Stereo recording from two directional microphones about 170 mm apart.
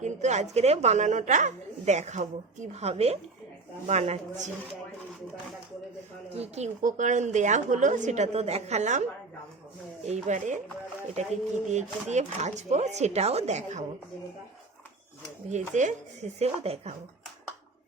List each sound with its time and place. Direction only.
0.0 s a woman's voice: 40° right (ahead or behind)
6.3 s a woman's voice: 40° right (ahead or behind)
10.1 s a woman's voice: 45° right (ahead or behind)
11.7 s speech: 45° right (ahead or behind)
15.4 s a woman's voice: 45° right (ahead or behind)